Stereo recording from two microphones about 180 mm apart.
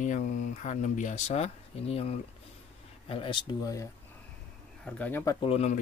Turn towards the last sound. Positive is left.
turn(degrees=35)  # may be behind; listen again after turning